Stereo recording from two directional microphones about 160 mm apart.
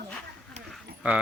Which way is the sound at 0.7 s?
5° right (ahead or behind).